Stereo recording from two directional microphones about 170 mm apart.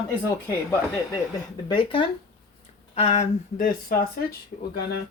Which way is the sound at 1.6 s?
30° left (ahead or behind).